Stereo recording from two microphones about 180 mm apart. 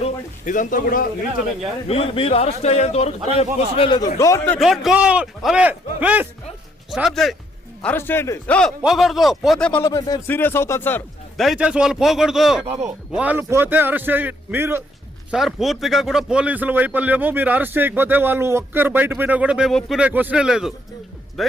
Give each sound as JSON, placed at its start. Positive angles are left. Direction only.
{"t": 0.0, "sound": "a man's voice", "side_deg": 45}
{"t": 1.9, "sound": "a man's voice", "side_deg": 30}
{"t": 4.5, "sound": "speech", "side_deg": 0}
{"t": 9.8, "sound": "speech", "side_deg": 20}
{"t": 11.3, "sound": "speech", "side_deg": 0}
{"t": 15.3, "sound": "speech", "side_deg": 0}